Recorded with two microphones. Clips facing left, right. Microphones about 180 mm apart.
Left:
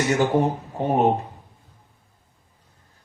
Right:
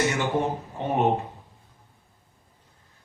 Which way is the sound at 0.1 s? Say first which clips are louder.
Left 6 dB; 40° left (ahead or behind).